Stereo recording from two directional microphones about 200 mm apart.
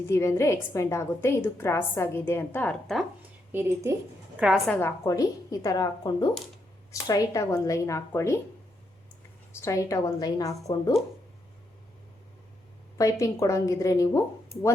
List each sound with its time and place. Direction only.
0.1 s a woman's voice: 15° left (ahead or behind)
3.5 s a woman's voice: 10° right (ahead or behind)
4.4 s a woman's voice: centre (ahead or behind)
4.8 s a woman's voice: 15° left (ahead or behind)
9.6 s a woman's voice: 15° left (ahead or behind)
13.0 s a woman's voice: 15° left (ahead or behind)